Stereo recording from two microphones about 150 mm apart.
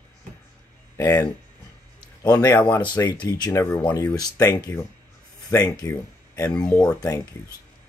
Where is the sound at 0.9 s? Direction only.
20° left (ahead or behind).